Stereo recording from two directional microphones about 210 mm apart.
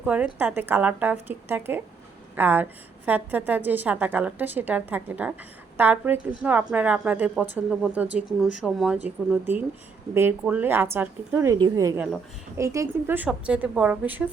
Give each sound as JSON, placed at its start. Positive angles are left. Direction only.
{"t": 0.0, "sound": "a woman's voice", "side_deg": -5}